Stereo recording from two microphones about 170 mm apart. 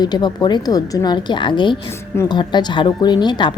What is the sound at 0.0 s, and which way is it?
Speech, 25° left (ahead or behind).